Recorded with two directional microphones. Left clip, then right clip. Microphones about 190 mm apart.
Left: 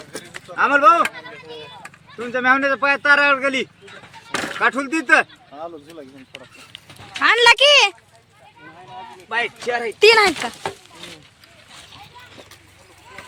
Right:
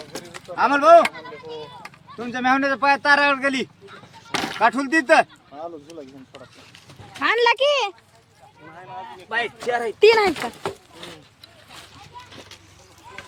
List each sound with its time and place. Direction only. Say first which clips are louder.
0.3 s speech: left 3 dB; 55° right (ahead or behind)
7.2 s speech: left 5 dB; 5° right (ahead or behind)
9.3 s speech: left 2 dB; 20° right (ahead or behind)
10.0 s speech: left 3 dB; centre (ahead or behind)